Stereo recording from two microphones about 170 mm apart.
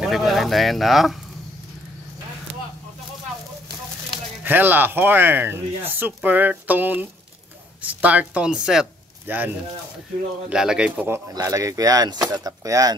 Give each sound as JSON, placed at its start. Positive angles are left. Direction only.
{"t": 0.0, "sound": "speech", "side_deg": 0}
{"t": 4.5, "sound": "speech", "side_deg": -10}
{"t": 10.5, "sound": "speech", "side_deg": -5}